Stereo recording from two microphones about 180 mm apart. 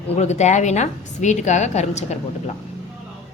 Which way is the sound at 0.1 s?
40° left (ahead or behind).